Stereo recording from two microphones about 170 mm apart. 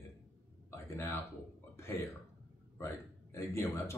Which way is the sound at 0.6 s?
15° left (ahead or behind).